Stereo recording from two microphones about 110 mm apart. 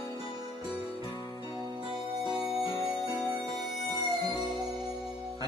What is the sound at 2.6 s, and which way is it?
Music, 50° left (ahead or behind).